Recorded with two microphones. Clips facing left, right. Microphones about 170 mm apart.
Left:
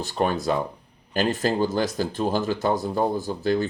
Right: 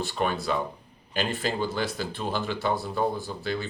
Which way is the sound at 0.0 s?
40° left (ahead or behind).